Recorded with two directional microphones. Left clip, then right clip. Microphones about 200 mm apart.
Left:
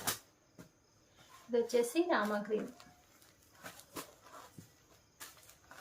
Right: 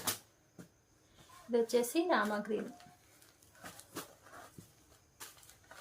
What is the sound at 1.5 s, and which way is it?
Speech, 35° right (ahead or behind).